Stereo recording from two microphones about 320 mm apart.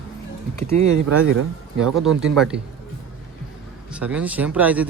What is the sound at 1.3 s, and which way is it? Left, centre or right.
Speech, right.